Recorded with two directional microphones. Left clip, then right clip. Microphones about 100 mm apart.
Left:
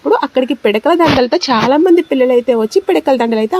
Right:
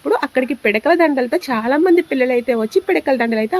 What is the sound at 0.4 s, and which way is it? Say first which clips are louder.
Speech: left 3 dB; 35° left (ahead or behind).